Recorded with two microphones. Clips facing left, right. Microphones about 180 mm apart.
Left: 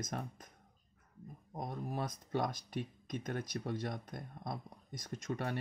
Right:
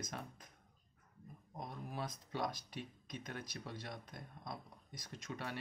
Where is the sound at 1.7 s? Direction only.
45° left (ahead or behind).